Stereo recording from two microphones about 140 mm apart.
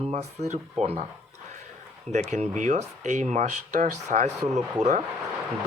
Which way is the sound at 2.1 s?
55° right (ahead or behind).